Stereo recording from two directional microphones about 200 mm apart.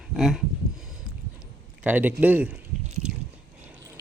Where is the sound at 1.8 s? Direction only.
10° right (ahead or behind).